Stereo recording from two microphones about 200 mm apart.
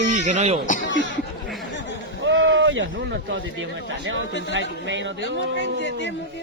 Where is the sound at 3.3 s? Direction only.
70° right (ahead or behind).